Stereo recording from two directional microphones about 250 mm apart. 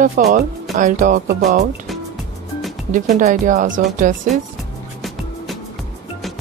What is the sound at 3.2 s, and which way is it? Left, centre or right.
Speech, right.